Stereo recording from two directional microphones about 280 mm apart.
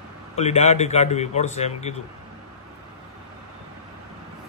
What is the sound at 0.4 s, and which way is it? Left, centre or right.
Speech, left.